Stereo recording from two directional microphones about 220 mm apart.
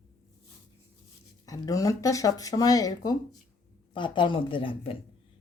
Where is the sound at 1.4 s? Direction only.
15° left (ahead or behind).